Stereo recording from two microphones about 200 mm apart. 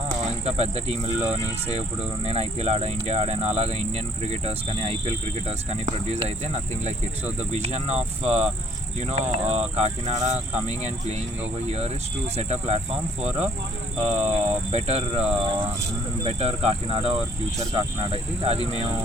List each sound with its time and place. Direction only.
0.4 s speech: 30° right (ahead or behind)
12.4 s speech: 30° right (ahead or behind)
14.1 s speech: 35° right (ahead or behind)